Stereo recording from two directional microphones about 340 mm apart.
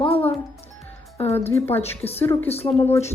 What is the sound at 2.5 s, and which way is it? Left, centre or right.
Speech, centre.